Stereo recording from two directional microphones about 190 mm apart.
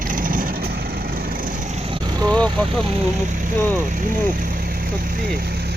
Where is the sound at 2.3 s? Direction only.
5° left (ahead or behind).